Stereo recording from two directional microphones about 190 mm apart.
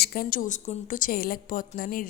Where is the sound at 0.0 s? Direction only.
55° left (ahead or behind).